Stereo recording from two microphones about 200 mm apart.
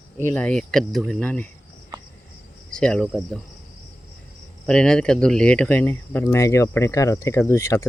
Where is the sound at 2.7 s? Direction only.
5° left (ahead or behind).